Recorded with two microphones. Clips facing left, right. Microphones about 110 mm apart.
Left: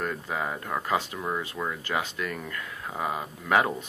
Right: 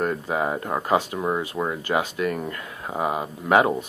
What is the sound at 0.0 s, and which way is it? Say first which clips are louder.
Speech: right 6 dB; 25° right (ahead or behind).